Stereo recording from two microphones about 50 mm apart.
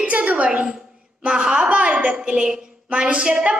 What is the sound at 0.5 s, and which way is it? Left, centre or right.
A woman's voice, right.